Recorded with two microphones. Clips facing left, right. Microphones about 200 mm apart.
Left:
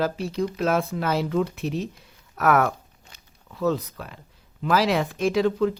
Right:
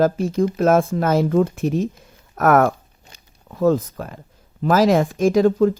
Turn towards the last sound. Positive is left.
turn(degrees=-45)  # may be behind; listen again after turning